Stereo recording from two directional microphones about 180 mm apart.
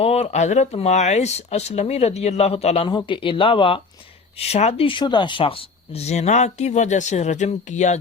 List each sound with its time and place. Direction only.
0.0 s speech: 35° left (ahead or behind)